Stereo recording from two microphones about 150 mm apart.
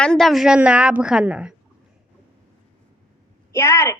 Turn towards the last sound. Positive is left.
turn(degrees=20)  # may be behind; listen again after turning